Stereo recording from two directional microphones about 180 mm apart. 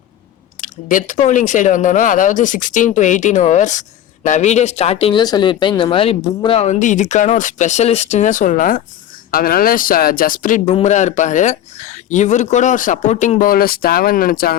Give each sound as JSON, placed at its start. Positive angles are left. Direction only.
{"t": 0.6, "sound": "speech", "side_deg": 45}